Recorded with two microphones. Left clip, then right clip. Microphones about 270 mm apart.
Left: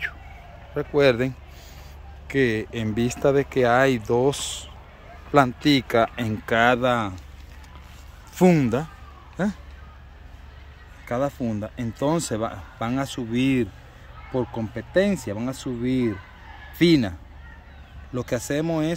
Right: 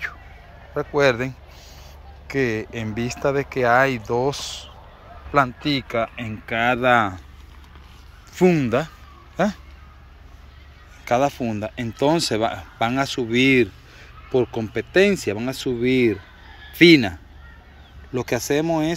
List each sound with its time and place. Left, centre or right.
0.7 s speech: centre
8.4 s speech: centre
11.1 s speech: centre
16.7 s speech: centre
18.1 s speech: centre